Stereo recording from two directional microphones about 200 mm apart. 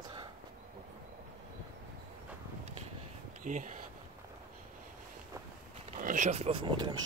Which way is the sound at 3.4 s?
40° right (ahead or behind).